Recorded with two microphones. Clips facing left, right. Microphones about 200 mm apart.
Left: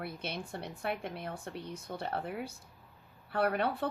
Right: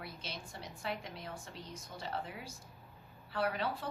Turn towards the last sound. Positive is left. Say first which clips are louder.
# left 5 dB
turn(degrees=60)  # may be behind; listen again after turning